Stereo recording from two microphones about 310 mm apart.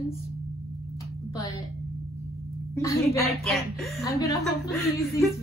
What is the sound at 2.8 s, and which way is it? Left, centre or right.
A woman's voice, centre.